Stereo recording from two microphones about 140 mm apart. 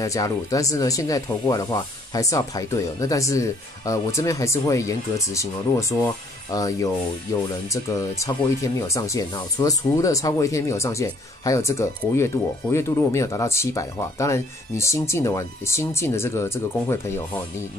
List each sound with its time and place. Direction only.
0.0 s speech: 25° left (ahead or behind)